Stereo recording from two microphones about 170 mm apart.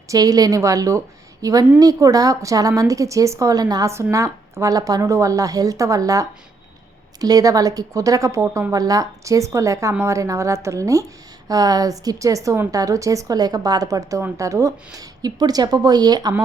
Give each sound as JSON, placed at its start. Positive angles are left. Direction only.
{"t": 0.1, "sound": "a woman's voice", "side_deg": -20}